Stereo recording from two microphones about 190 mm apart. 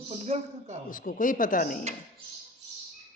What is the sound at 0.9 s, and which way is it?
Speech, 45° left (ahead or behind).